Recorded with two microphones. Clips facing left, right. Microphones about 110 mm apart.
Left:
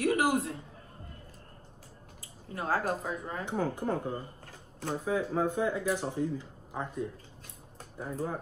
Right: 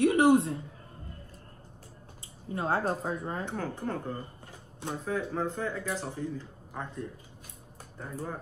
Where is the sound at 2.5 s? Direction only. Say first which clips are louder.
Right 2 dB; 25° right (ahead or behind).